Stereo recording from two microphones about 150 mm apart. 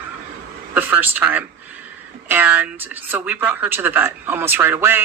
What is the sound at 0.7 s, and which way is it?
Speech, 10° right (ahead or behind).